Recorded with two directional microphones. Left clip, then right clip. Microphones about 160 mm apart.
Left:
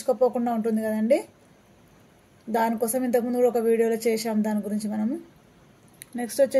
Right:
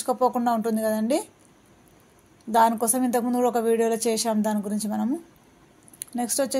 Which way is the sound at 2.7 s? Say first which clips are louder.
Left 1 dB; 25° right (ahead or behind).